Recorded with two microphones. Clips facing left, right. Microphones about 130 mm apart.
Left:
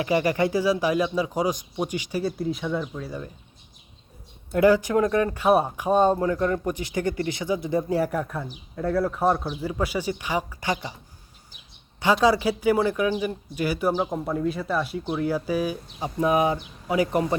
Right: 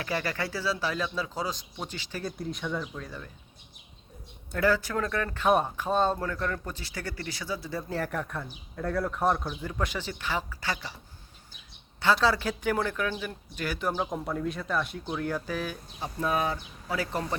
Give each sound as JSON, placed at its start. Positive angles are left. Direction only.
{"t": 0.0, "sound": "speech", "side_deg": 15}
{"t": 2.2, "sound": "speech", "side_deg": 0}
{"t": 4.5, "sound": "speech", "side_deg": 15}
{"t": 12.2, "sound": "speech", "side_deg": 10}